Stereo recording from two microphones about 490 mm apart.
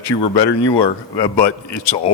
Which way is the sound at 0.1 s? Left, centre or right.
Left.